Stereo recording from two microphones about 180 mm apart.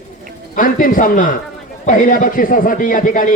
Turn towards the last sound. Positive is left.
turn(degrees=50)  # may be behind; listen again after turning